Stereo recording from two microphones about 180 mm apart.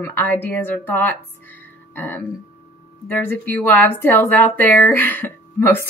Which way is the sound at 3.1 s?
10° left (ahead or behind).